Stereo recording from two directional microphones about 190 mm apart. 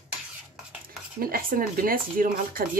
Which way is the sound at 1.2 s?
50° right (ahead or behind).